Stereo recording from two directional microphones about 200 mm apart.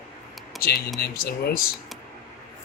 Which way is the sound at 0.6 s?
50° left (ahead or behind).